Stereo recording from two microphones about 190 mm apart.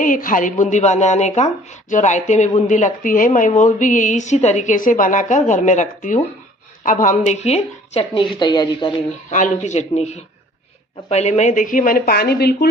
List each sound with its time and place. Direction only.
0.0 s speech: 45° left (ahead or behind); by 9.0 s 25° left (ahead or behind)
9.3 s speech: 40° left (ahead or behind); by 12.6 s 55° left (ahead or behind)